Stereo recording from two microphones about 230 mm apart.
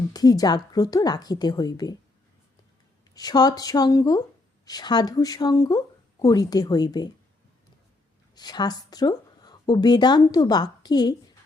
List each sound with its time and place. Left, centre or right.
0.1 s speech: centre
3.2 s speech: centre
8.4 s speech: centre